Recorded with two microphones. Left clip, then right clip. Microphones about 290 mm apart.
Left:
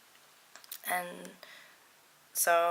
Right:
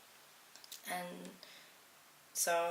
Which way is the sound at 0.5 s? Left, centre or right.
Centre.